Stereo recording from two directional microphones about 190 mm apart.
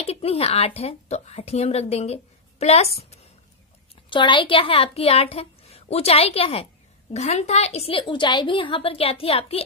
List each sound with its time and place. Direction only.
0.0 s a woman's voice: 30° left (ahead or behind)